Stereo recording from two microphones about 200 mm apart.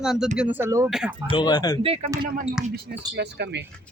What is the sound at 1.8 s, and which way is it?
Speech, 30° right (ahead or behind).